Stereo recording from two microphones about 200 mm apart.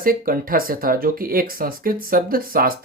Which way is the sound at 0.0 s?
45° right (ahead or behind).